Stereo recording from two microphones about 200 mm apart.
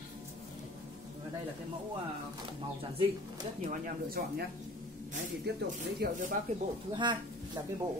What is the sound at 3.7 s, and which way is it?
Speech, 50° right (ahead or behind).